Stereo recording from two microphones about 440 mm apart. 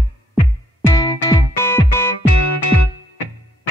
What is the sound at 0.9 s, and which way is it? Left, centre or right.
Music, centre.